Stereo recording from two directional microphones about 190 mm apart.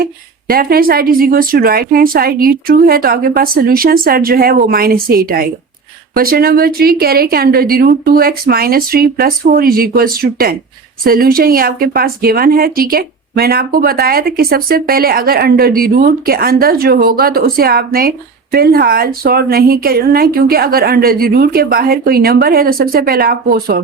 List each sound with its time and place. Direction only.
0.0 s speech: 50° right (ahead or behind)